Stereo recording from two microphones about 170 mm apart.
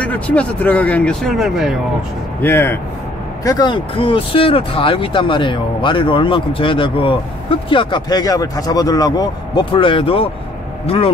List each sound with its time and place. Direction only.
0.0 s speech: 10° left (ahead or behind)
2.4 s speech: 15° left (ahead or behind)
3.4 s speech: 25° left (ahead or behind)